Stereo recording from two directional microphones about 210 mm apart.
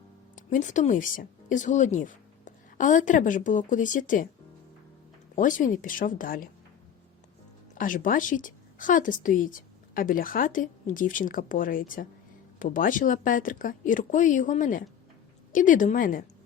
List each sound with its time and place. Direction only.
0.3 s speech: 35° left (ahead or behind)
5.3 s speech: 40° left (ahead or behind)
7.8 s speech: 40° left (ahead or behind)